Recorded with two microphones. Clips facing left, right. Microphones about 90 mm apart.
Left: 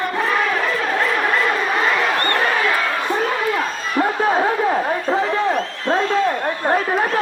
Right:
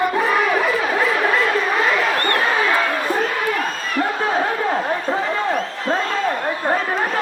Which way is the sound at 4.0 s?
25° left (ahead or behind).